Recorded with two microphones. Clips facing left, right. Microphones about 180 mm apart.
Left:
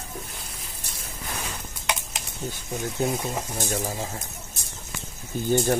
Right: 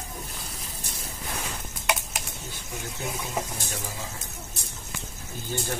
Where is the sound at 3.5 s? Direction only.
45° left (ahead or behind).